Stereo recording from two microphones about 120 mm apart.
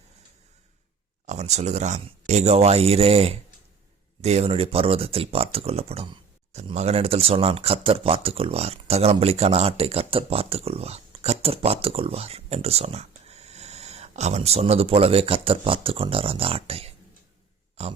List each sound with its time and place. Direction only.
1.3 s speech: 70° right (ahead or behind)